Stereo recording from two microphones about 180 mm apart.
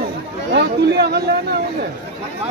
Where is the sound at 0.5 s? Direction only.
65° right (ahead or behind).